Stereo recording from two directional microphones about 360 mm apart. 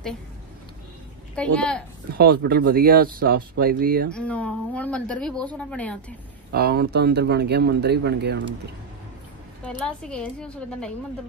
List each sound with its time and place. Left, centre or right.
1.3 s speech: centre
2.1 s speech: right
4.1 s speech: centre
6.5 s speech: right
9.8 s speech: centre